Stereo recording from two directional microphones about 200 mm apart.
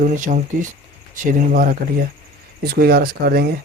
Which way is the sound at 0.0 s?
40° right (ahead or behind).